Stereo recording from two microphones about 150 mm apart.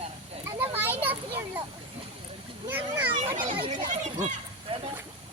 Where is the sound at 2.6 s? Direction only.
10° right (ahead or behind).